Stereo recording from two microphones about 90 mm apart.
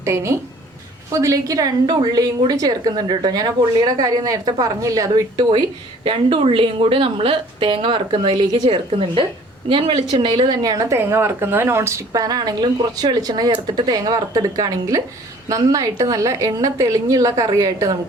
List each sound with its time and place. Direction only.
0.0 s a woman's voice: 30° right (ahead or behind)
6.1 s a woman's voice: 85° right
8.3 s a woman's voice: 65° right (ahead or behind)
10.6 s a woman's voice: 40° right (ahead or behind)
10.9 s a woman's voice: 25° right (ahead or behind); by 17.9 s 40° right (ahead or behind)